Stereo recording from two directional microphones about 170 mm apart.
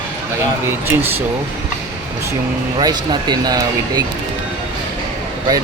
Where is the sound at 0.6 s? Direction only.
15° right (ahead or behind).